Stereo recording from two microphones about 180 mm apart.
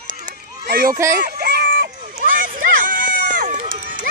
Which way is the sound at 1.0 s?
50° right (ahead or behind).